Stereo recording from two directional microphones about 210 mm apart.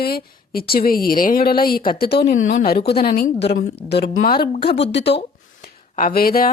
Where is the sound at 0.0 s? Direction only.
45° left (ahead or behind).